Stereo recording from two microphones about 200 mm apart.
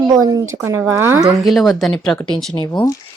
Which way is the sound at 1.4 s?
Centre (ahead or behind).